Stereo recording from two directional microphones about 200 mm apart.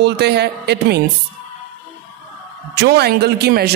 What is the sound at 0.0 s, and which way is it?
Speech, 55° right (ahead or behind).